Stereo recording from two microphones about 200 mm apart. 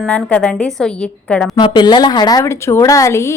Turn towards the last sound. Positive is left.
turn(degrees=15)  # may be behind; listen again after turning